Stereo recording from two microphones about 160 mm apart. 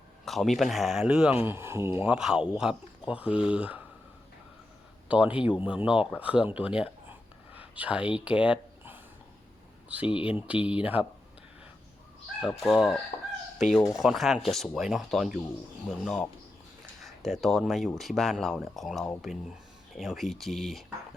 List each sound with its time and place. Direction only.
0.3 s speech: centre (ahead or behind)
5.0 s speech: 10° right (ahead or behind)
10.1 s speech: 35° left (ahead or behind)
10.3 s speech: 10° right (ahead or behind)
12.4 s speech: centre (ahead or behind)